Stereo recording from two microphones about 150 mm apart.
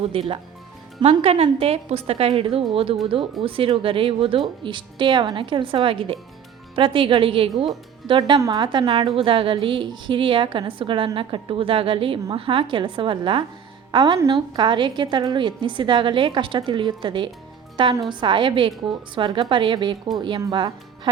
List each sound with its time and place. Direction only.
0.1 s a woman's voice: 40° right (ahead or behind)